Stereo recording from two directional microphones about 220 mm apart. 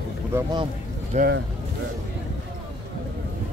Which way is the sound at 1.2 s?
45° right (ahead or behind).